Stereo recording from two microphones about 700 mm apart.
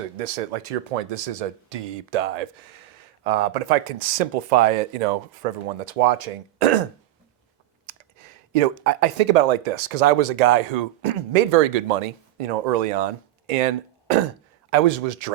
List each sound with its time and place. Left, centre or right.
0.2 s speech: right
8.5 s speech: right